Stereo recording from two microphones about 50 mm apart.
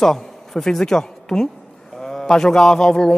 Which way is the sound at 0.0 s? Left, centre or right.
Centre.